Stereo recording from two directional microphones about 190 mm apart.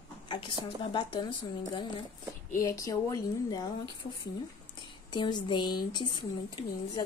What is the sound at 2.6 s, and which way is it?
A woman's voice, 15° left (ahead or behind).